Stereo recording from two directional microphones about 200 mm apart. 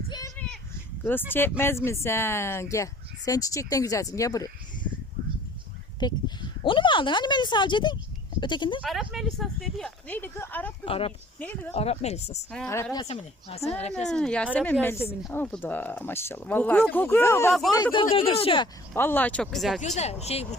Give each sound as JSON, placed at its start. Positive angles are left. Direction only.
{"t": 0.3, "sound": "a sound", "side_deg": 5}
{"t": 1.3, "sound": "speech", "side_deg": 10}
{"t": 6.0, "sound": "speech", "side_deg": 20}
{"t": 8.8, "sound": "speech", "side_deg": 0}
{"t": 10.8, "sound": "speech", "side_deg": 30}
{"t": 11.3, "sound": "speech", "side_deg": 10}
{"t": 11.7, "sound": "speech", "side_deg": 30}
{"t": 12.5, "sound": "speech", "side_deg": 10}
{"t": 14.1, "sound": "speech", "side_deg": 5}
{"t": 17.9, "sound": "speech", "side_deg": 30}
{"t": 18.9, "sound": "speech", "side_deg": 10}
{"t": 20.0, "sound": "speech", "side_deg": 30}